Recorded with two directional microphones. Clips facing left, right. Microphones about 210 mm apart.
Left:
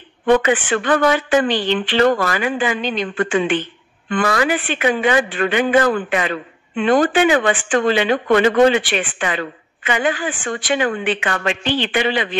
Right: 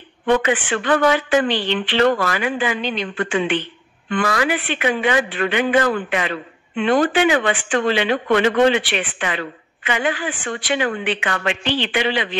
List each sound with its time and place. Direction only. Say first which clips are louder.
0.8 s speech: even; 45° left (ahead or behind)